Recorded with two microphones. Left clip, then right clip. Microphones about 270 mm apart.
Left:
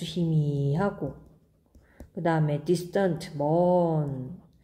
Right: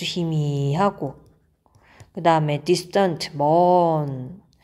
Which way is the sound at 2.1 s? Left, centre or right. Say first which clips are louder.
Right 8 dB; centre.